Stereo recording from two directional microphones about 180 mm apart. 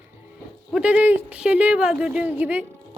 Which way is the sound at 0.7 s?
5° right (ahead or behind).